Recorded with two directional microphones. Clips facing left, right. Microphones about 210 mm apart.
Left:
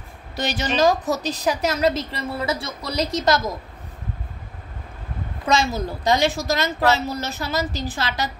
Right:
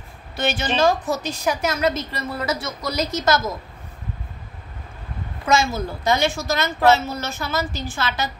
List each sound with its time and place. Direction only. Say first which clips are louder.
0.4 s a woman's voice: even; 35° left (ahead or behind)
5.5 s a woman's voice: right 1 dB; 35° left (ahead or behind)